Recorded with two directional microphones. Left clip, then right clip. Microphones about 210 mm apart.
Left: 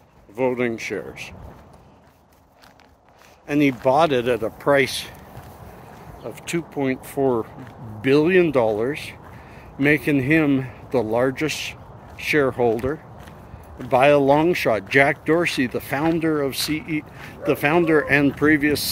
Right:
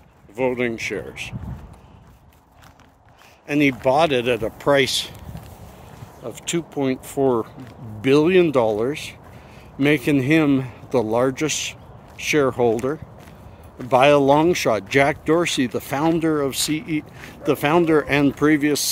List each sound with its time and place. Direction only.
0.4 s speech: 15° right (ahead or behind)
3.4 s speech: 15° right (ahead or behind); by 5.1 s 35° right (ahead or behind)
6.2 s speech: 30° right (ahead or behind)